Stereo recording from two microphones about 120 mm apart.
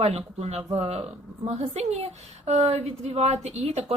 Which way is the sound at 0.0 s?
60° right (ahead or behind).